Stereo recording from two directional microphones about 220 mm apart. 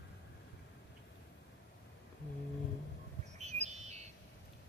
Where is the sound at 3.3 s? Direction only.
30° right (ahead or behind).